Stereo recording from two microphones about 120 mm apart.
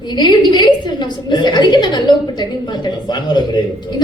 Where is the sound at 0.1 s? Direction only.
40° left (ahead or behind).